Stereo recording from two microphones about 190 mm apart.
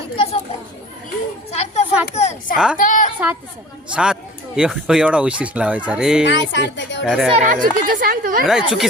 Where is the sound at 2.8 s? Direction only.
45° left (ahead or behind).